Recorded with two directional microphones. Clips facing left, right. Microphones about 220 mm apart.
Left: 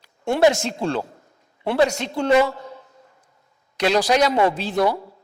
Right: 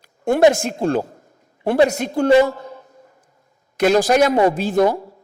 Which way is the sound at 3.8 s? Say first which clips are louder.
Right 4 dB; 50° right (ahead or behind).